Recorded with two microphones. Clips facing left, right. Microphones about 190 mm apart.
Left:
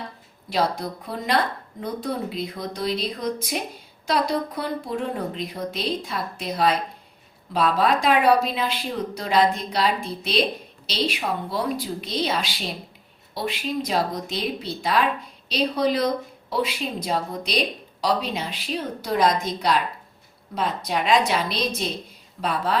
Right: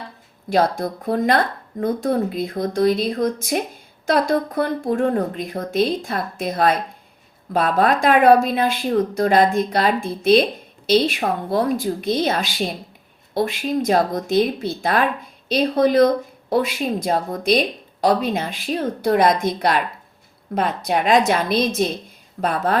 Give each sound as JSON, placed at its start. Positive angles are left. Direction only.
{"t": 0.5, "sound": "a woman's voice", "side_deg": -50}